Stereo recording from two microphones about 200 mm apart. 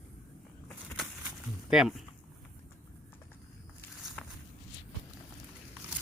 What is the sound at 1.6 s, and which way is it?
Speech, centre (ahead or behind).